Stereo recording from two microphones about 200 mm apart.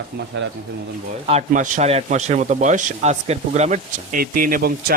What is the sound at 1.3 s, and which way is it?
Speech, 35° right (ahead or behind).